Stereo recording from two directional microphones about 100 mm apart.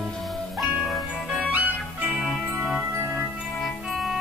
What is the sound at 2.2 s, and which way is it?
Music, 5° right (ahead or behind).